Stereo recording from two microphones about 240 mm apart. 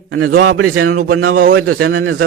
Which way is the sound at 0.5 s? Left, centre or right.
Right.